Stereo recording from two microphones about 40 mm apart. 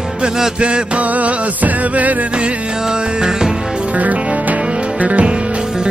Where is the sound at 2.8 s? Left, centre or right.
Centre.